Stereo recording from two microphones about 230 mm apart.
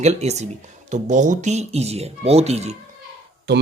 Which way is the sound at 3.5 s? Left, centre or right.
Right.